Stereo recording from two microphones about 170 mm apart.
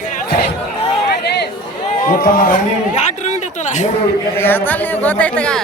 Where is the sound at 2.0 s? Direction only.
60° left (ahead or behind).